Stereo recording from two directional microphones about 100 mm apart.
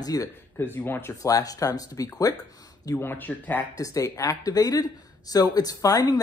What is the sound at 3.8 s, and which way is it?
Speech, 35° left (ahead or behind).